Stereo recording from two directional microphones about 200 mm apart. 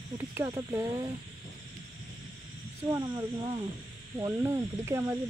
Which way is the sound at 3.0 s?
15° right (ahead or behind).